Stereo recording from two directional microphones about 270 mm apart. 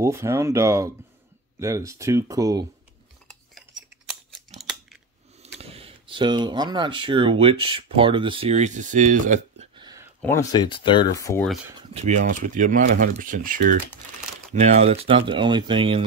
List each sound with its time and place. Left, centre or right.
0.0 s speech: centre
4.1 s scissors: centre
5.4 s speech: right
10.2 s speech: centre
11.9 s speech: right